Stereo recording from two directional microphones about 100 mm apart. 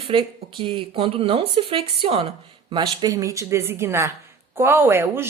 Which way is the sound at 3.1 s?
30° right (ahead or behind).